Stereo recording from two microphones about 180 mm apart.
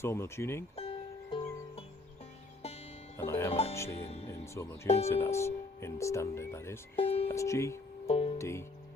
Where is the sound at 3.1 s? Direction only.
15° left (ahead or behind).